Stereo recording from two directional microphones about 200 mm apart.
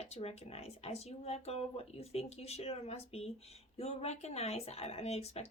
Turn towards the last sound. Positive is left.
turn(degrees=30)  # may be behind; listen again after turning